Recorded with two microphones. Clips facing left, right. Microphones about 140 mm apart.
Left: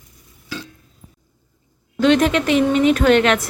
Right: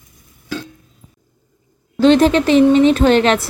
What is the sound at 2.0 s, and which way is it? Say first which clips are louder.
A woman's voice: right 4 dB; 30° right (ahead or behind).